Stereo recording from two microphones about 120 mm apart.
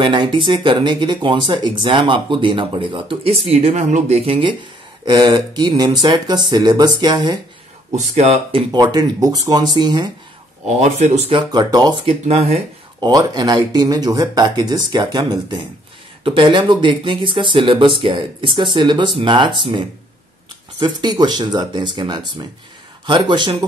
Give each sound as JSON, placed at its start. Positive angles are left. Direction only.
{"t": 0.0, "sound": "speech", "side_deg": -45}
{"t": 5.0, "sound": "speech", "side_deg": -35}
{"t": 7.9, "sound": "speech", "side_deg": -65}
{"t": 8.7, "sound": "speech", "side_deg": -35}
{"t": 10.8, "sound": "speech", "side_deg": -70}
{"t": 11.3, "sound": "speech", "side_deg": -35}
{"t": 12.1, "sound": "speech", "side_deg": -65}
{"t": 13.0, "sound": "speech", "side_deg": -35}
{"t": 20.8, "sound": "speech", "side_deg": -35}